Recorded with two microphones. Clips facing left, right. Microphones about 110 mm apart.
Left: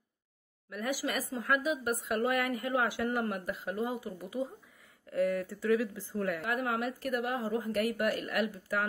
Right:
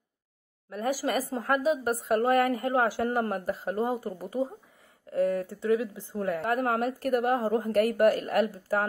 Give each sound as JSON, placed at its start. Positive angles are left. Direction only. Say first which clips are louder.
{"t": 0.7, "sound": "a woman's voice", "louder": "right 6 dB", "side_deg": -35}